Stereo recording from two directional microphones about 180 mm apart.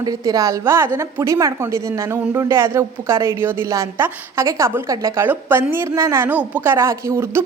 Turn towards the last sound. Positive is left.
turn(degrees=-15)  # may be behind; listen again after turning